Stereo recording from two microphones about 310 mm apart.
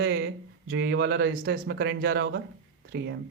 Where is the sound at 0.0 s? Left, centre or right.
Right.